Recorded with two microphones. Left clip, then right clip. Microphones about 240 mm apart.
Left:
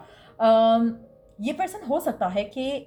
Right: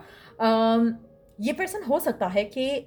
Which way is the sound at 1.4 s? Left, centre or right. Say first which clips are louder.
Even; right.